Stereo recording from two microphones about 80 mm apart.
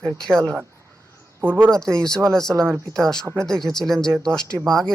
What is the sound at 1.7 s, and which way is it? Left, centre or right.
Speech, centre.